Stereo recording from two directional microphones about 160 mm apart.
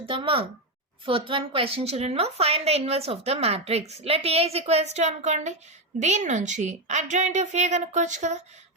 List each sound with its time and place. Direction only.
0.0 s a woman's voice: 35° right (ahead or behind); by 8.4 s 50° right (ahead or behind)